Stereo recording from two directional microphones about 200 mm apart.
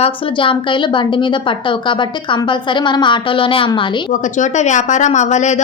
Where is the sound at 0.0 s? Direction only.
25° left (ahead or behind).